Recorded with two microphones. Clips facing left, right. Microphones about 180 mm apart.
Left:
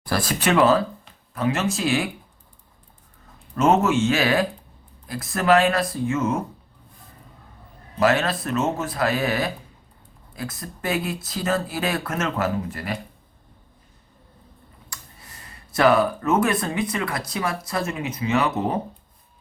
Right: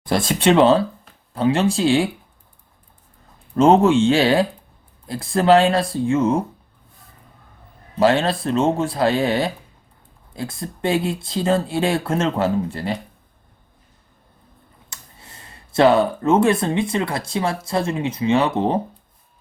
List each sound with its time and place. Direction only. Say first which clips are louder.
0.0 s speech: right 5 dB; 25° right (ahead or behind)
3.5 s speech: right 5 dB; 30° right (ahead or behind)
7.9 s speech: right 3 dB; 30° right (ahead or behind)
14.8 s speech: even; 25° right (ahead or behind)